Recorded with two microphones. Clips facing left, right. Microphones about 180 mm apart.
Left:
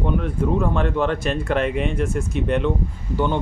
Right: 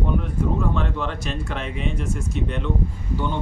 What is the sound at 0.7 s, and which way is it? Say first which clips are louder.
Speech: left 6 dB; 55° left (ahead or behind).